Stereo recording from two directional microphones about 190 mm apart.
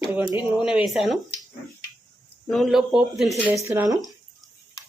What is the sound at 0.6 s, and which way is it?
Speech, 5° right (ahead or behind).